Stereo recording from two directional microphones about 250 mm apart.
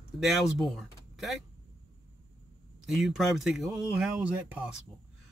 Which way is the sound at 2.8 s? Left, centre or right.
Centre.